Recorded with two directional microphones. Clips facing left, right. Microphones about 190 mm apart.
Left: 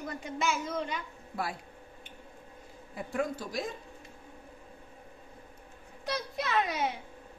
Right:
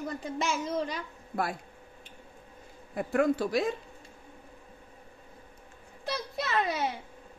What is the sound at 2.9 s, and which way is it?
Speech, 65° right (ahead or behind).